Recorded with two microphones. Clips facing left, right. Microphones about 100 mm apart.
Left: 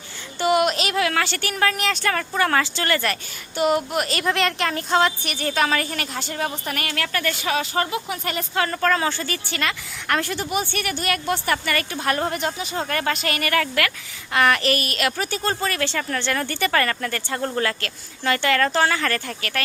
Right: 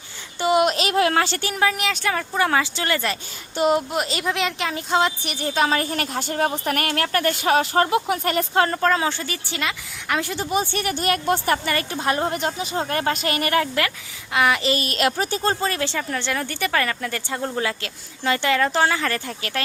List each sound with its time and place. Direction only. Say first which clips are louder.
0.3 s a sound: even; 20° right (ahead or behind)
0.6 s a woman's voice: right 2 dB; 35° right (ahead or behind)
1.5 s speech: even; 10° right (ahead or behind)
3.5 s speech: right 1 dB; 35° right (ahead or behind)
3.9 s a woman's voice: even; 20° right (ahead or behind)
4.2 s a woman's voice: left 2 dB; 5° right (ahead or behind); by 8.2 s 55° right (ahead or behind)
8.2 s a woman's voice: right 4 dB; 40° right (ahead or behind)
8.8 s a woman's voice: right 1 dB; 20° right (ahead or behind)
10.3 s a woman's voice: right 2 dB; 30° right (ahead or behind)
14.3 s speech: left 1 dB; 15° right (ahead or behind)
14.8 s a woman's voice: right 2 dB; 30° right (ahead or behind)